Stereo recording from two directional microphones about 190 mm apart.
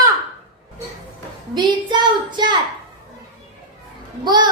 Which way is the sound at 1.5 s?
25° right (ahead or behind).